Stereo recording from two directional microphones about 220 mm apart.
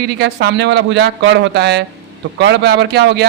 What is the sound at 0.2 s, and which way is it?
Speech, 50° right (ahead or behind).